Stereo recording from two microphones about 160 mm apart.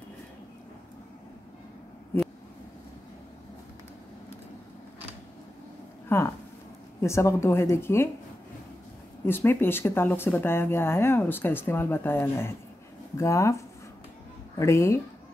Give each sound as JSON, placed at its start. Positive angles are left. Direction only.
{"t": 6.0, "sound": "a sound", "side_deg": 15}
{"t": 7.0, "sound": "speech", "side_deg": 20}
{"t": 9.2, "sound": "speech", "side_deg": 15}